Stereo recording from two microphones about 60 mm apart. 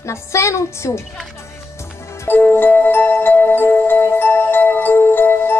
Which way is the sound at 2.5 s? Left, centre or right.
Left.